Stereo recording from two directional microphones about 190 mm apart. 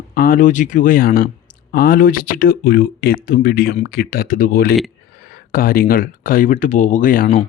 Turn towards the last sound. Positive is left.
turn(degrees=45)  # may be behind; listen again after turning